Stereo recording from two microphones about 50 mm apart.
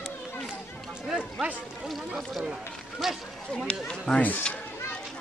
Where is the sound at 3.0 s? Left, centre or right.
Centre.